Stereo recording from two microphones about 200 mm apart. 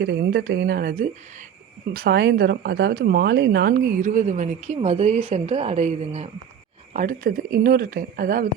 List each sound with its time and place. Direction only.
0.0 s speech: 50° right (ahead or behind); by 6.2 s 30° right (ahead or behind)
6.9 s speech: 40° right (ahead or behind)